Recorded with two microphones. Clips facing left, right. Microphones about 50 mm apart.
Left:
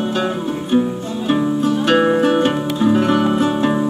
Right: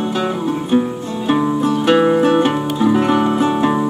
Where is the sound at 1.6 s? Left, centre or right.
Right.